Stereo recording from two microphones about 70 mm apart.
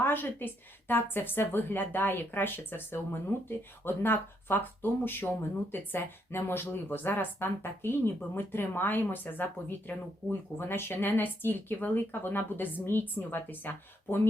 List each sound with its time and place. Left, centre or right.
0.0 s speech: left